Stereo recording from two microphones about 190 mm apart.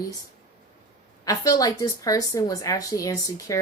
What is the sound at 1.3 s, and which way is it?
A woman's voice, 20° left (ahead or behind).